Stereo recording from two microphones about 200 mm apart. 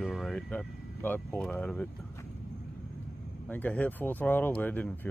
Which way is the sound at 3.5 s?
10° left (ahead or behind).